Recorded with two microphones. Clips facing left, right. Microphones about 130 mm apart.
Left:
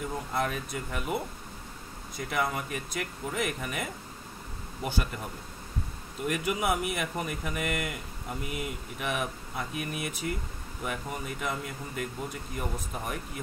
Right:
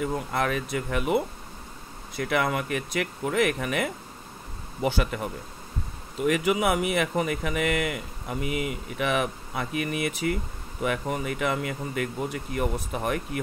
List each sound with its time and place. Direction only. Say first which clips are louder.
0.0 s speech: right 4 dB; 80° right
2.1 s speech: right 5 dB; 70° right (ahead or behind)
4.8 s speech: right 7 dB; 90° right
6.2 s speech: right 6 dB; 90° right